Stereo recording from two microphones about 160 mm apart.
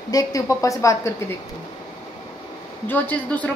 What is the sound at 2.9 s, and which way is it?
Speech, 10° left (ahead or behind).